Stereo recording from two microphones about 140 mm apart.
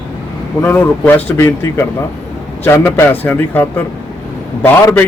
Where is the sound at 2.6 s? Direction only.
15° left (ahead or behind).